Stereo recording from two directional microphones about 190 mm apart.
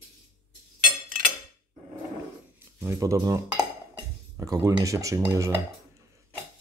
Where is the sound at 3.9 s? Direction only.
15° right (ahead or behind).